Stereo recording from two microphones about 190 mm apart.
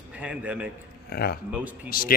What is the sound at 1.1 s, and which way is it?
Speech, 55° left (ahead or behind).